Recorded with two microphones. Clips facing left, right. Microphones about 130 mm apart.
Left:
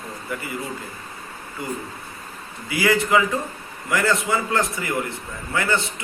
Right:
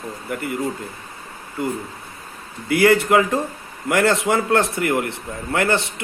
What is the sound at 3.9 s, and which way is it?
A man's voice, 75° right (ahead or behind).